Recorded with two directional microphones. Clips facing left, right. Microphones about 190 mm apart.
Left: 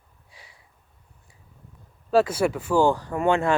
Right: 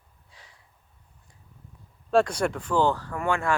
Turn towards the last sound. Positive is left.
turn(degrees=25)  # may be behind; listen again after turning